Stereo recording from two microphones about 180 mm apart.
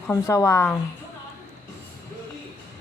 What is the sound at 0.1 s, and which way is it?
Speech, 15° left (ahead or behind).